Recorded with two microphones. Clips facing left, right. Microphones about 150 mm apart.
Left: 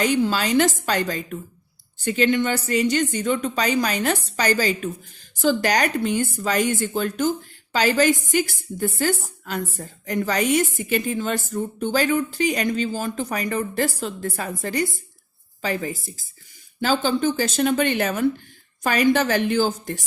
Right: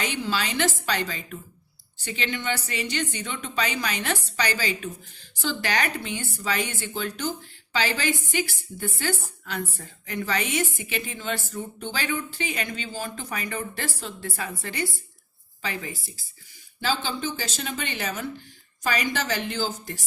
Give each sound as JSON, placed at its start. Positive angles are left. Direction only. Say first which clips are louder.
{"t": 0.0, "sound": "a woman's voice", "louder": "left 8 dB", "side_deg": 45}